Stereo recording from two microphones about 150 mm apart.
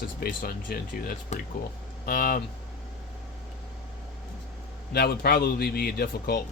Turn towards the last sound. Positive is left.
turn(degrees=90)